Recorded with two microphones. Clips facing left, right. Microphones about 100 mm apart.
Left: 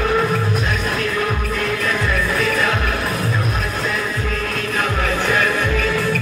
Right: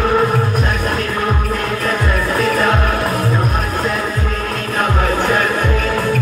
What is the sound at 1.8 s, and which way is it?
Music, 40° right (ahead or behind).